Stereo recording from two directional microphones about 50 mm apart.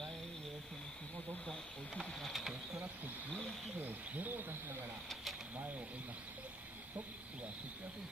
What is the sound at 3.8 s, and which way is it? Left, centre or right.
Owl, right.